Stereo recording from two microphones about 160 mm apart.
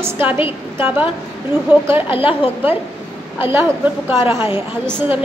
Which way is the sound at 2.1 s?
35° left (ahead or behind).